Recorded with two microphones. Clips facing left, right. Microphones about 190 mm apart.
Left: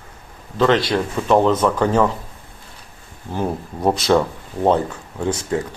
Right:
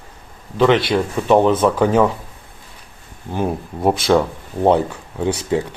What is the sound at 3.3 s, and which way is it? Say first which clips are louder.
Speech: right 2 dB; 10° right (ahead or behind).